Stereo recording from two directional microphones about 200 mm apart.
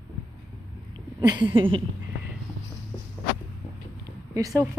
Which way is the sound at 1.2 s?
20° right (ahead or behind).